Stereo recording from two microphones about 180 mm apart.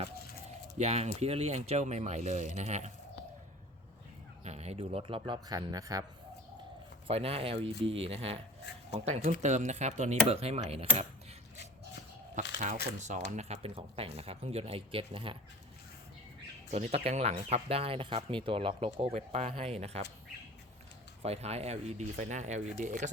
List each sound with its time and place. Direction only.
0.8 s speech: 35° right (ahead or behind)
4.4 s speech: 40° right (ahead or behind); by 6.1 s 20° right (ahead or behind)
7.1 s speech: 35° right (ahead or behind)
12.5 s speech: 40° right (ahead or behind)
16.7 s speech: 35° right (ahead or behind)
21.2 s speech: 35° right (ahead or behind)